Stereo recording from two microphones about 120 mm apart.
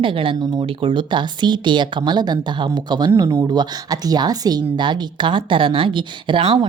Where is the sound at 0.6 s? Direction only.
50° right (ahead or behind).